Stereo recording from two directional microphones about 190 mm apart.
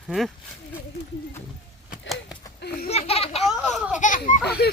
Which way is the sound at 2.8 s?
35° left (ahead or behind).